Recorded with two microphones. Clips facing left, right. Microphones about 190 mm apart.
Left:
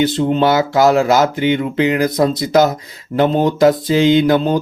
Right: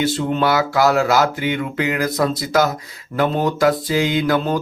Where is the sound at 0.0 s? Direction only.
20° left (ahead or behind).